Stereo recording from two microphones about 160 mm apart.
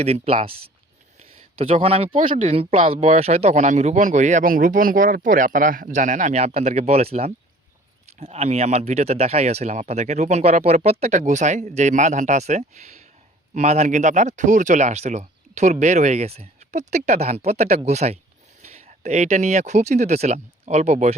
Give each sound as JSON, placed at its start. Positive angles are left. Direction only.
{"t": 0.0, "sound": "speech", "side_deg": -40}
{"t": 1.5, "sound": "speech", "side_deg": -40}